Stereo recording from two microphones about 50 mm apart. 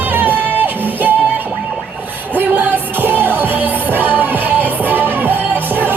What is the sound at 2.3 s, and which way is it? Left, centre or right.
Music, right.